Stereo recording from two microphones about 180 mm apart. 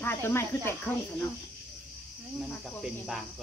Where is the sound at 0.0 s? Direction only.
15° left (ahead or behind).